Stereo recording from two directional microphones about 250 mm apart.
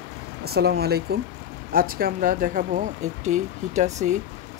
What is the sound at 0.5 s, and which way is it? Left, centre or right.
Speech, right.